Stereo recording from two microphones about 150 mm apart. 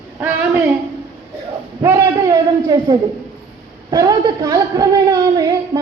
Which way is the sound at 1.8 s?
20° right (ahead or behind).